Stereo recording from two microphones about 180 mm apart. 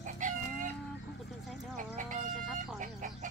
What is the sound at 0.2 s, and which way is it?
Chicken, 45° right (ahead or behind).